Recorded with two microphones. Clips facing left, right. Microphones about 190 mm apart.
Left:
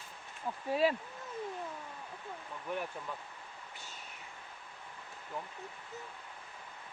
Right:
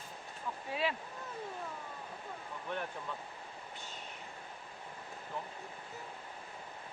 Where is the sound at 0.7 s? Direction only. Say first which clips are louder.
Left 6 dB; 40° left (ahead or behind).